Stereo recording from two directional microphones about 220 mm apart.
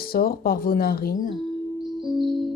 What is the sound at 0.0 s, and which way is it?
Speech, 40° left (ahead or behind).